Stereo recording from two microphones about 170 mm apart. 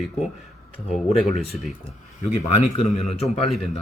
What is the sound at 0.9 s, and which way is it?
Speech, 40° left (ahead or behind).